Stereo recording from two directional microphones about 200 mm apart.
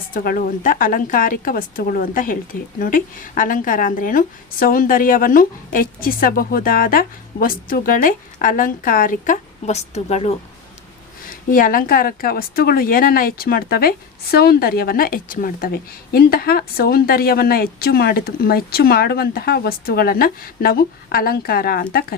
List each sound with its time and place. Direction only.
0.1 s speech: 45° left (ahead or behind)
11.5 s speech: 45° left (ahead or behind)